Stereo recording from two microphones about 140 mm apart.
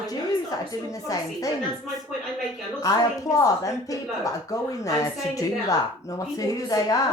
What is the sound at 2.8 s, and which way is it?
Speech, 25° left (ahead or behind).